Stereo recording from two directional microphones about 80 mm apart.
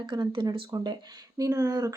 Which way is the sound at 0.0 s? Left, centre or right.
Right.